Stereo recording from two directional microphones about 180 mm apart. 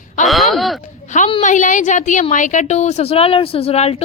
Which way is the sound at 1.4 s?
45° left (ahead or behind).